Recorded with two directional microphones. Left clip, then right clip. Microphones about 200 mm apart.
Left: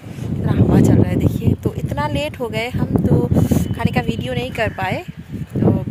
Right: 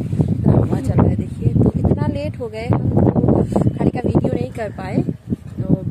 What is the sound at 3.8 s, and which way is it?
Speech, 5° left (ahead or behind).